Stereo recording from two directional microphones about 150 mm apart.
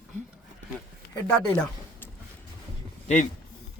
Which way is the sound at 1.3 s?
5° left (ahead or behind).